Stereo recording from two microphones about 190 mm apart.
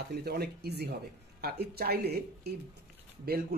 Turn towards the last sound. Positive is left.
turn(degrees=-55)  # may be behind; listen again after turning